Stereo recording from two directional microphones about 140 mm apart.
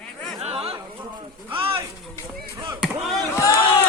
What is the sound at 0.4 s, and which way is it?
Chatter, 45° right (ahead or behind).